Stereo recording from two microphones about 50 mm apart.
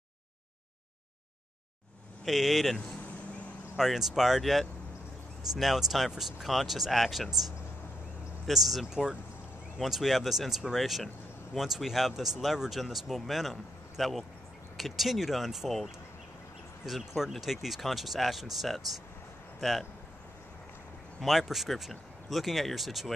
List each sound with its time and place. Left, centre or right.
2.2 s speech: centre
3.0 s vehicle: left
3.7 s speech: centre
21.2 s speech: centre